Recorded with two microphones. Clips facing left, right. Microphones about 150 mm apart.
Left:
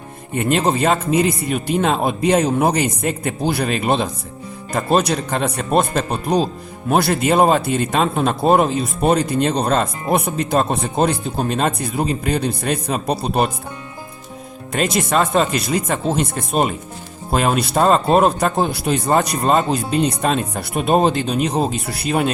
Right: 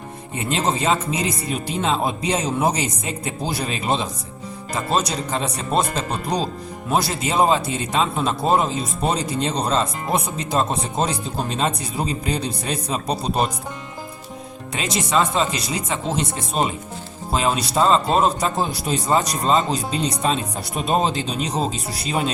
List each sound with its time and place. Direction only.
0.3 s speech: 55° left (ahead or behind)
14.7 s speech: 50° left (ahead or behind)